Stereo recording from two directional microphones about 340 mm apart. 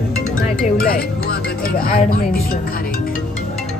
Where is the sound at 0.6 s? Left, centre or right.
Left.